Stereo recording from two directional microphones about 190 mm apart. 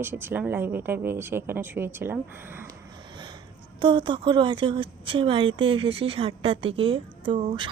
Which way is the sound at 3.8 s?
25° right (ahead or behind).